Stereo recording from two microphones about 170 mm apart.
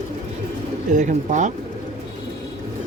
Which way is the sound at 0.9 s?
45° right (ahead or behind).